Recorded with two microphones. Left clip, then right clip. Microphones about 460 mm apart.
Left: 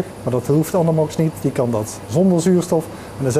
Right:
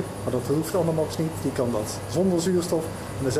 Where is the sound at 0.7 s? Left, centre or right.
Left.